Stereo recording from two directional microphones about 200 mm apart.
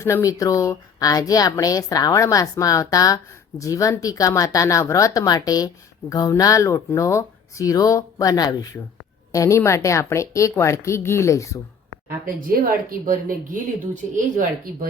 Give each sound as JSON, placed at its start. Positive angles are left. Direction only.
{"t": 0.0, "sound": "a woman's voice", "side_deg": 15}
{"t": 12.2, "sound": "speech", "side_deg": -45}